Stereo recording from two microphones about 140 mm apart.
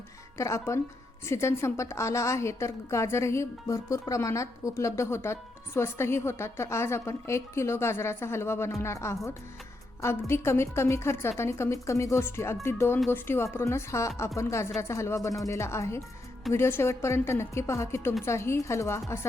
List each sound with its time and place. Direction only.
0.3 s a woman's voice: 20° left (ahead or behind)